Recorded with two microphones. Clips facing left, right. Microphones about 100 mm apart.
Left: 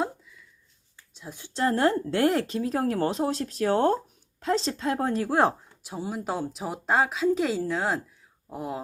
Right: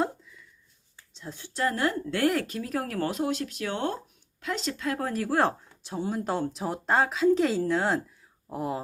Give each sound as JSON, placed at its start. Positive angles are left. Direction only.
{"t": 1.1, "sound": "speech", "side_deg": 15}